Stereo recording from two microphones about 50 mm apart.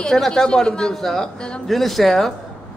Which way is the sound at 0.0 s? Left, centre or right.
Centre.